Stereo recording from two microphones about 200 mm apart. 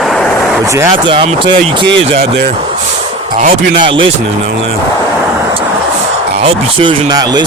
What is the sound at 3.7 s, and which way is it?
Speech, 25° right (ahead or behind).